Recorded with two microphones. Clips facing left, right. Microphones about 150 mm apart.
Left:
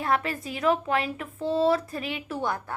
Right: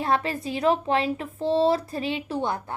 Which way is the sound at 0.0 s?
30° right (ahead or behind).